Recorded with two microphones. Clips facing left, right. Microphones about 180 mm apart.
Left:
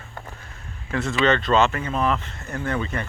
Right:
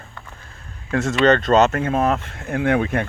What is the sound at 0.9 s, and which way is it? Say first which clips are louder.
Speech: right 5 dB; 45° right (ahead or behind).